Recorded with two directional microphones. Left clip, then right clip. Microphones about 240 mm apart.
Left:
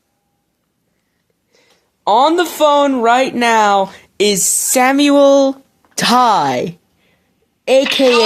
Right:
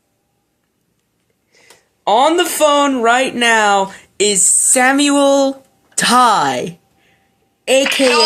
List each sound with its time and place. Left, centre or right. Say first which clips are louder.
2.0 s speech: left 1 dB; left